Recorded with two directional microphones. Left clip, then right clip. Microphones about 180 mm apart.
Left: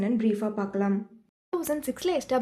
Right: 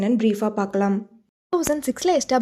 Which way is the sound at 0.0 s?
40° right (ahead or behind).